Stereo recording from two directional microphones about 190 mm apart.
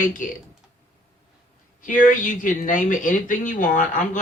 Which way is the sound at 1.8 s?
45° left (ahead or behind).